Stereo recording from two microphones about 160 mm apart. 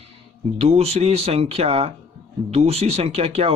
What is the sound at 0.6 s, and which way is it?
Speech, 40° right (ahead or behind).